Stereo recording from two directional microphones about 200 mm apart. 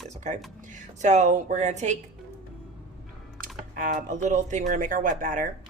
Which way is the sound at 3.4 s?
40° right (ahead or behind).